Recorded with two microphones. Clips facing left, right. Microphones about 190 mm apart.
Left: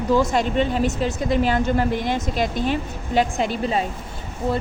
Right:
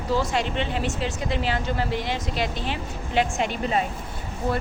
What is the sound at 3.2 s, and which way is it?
Speech, 35° left (ahead or behind).